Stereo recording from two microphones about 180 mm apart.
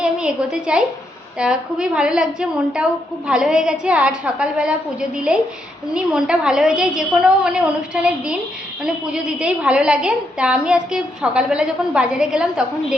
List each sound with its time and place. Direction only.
0.0 s a woman's voice: 5° right (ahead or behind)